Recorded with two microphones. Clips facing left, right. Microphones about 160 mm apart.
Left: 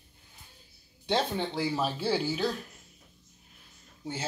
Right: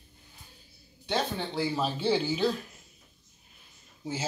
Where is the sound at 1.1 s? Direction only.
10° left (ahead or behind).